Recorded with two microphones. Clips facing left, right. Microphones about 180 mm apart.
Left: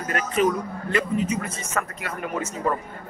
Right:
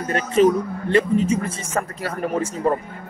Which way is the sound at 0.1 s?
30° right (ahead or behind).